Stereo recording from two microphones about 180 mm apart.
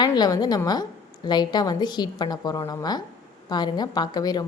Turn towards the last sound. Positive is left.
turn(degrees=20)  # may be behind; listen again after turning